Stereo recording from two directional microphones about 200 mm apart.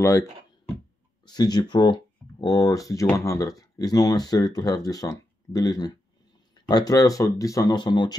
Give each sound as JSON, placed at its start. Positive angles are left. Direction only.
{"t": 1.2, "sound": "speech", "side_deg": 20}